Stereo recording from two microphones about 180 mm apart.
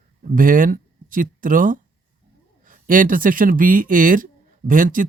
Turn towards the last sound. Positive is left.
turn(degrees=-50)  # may be behind; listen again after turning